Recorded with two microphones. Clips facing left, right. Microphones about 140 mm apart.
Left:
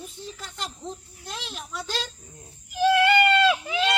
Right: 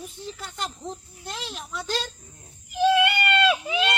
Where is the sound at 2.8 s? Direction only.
15° right (ahead or behind).